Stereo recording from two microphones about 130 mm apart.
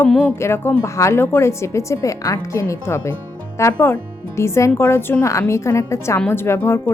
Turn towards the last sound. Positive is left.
turn(degrees=15)  # may be behind; listen again after turning